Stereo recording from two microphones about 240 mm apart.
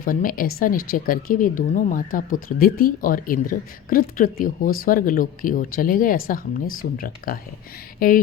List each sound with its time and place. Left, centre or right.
0.0 s speech: left